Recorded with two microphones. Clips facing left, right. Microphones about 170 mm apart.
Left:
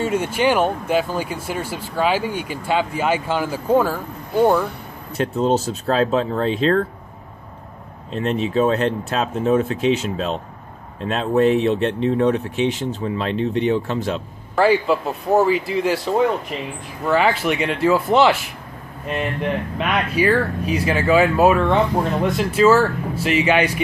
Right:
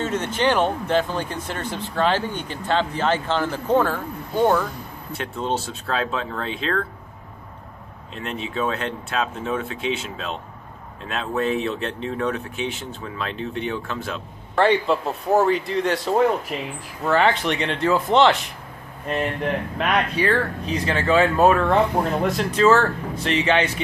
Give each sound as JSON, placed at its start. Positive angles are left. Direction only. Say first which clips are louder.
{"t": 0.0, "sound": "speech", "louder": "left 3 dB", "side_deg": 10}
{"t": 5.1, "sound": "speech", "louder": "left 7 dB", "side_deg": 40}
{"t": 8.1, "sound": "speech", "louder": "left 9 dB", "side_deg": 35}
{"t": 14.5, "sound": "speech", "louder": "left 2 dB", "side_deg": 5}
{"t": 19.8, "sound": "speech", "louder": "left 2 dB", "side_deg": 5}